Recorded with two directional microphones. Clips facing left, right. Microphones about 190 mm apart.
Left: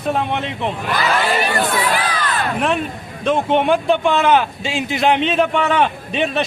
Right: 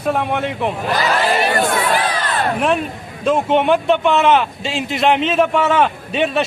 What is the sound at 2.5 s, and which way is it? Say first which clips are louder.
A man's voice: right 2 dB; 5° right (ahead or behind).